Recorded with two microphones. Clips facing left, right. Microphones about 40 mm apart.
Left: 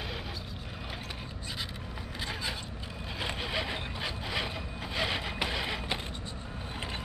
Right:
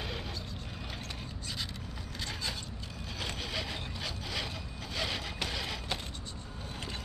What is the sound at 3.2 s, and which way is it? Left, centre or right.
Wood, left.